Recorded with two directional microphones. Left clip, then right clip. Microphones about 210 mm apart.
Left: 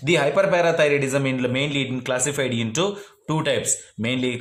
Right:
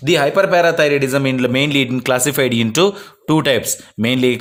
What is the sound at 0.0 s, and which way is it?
A man's voice, 35° right (ahead or behind).